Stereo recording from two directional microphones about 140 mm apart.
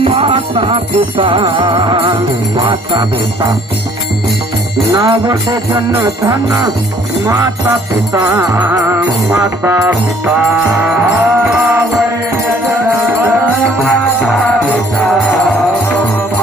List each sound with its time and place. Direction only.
0.0 s music: 40° right (ahead or behind)
1.4 s jingle bell: 35° right (ahead or behind)
4.9 s music: 30° right (ahead or behind)
8.1 s music: 25° right (ahead or behind)
10.2 s jingle bell: 5° right (ahead or behind)
15.2 s music: 5° left (ahead or behind)